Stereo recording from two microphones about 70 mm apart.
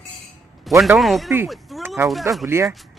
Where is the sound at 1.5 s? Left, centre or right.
Centre.